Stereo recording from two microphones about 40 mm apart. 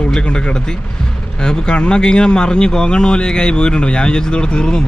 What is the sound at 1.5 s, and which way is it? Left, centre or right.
Speech, left.